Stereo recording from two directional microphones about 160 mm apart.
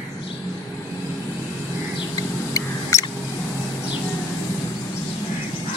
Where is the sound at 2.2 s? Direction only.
20° left (ahead or behind).